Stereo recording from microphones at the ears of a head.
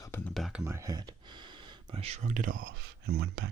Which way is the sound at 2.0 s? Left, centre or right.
Right.